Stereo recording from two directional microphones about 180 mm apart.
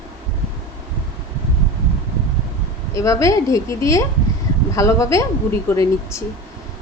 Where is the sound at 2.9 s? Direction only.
15° left (ahead or behind).